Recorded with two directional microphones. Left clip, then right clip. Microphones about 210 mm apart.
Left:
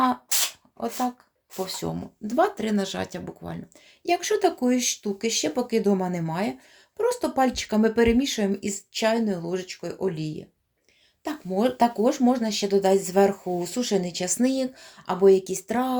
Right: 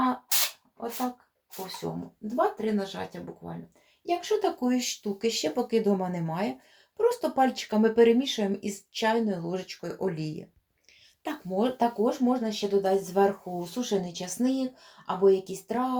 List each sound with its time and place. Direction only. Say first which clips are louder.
1.8 s speech: left 3 dB; 50° left (ahead or behind)
4.0 s speech: left 4 dB; 40° left (ahead or behind); by 11.9 s 25° left (ahead or behind)
12.0 s speech: left 4 dB; 50° left (ahead or behind)